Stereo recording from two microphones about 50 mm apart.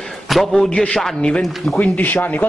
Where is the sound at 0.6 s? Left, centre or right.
Centre.